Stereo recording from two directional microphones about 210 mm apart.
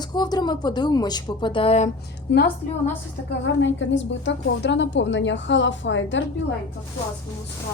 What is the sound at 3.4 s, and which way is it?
A woman's voice, 60° left (ahead or behind).